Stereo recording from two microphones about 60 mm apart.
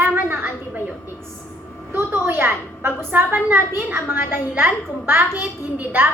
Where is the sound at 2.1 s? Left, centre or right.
Right.